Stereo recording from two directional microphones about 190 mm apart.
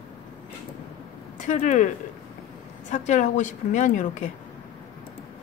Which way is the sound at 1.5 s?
40° left (ahead or behind).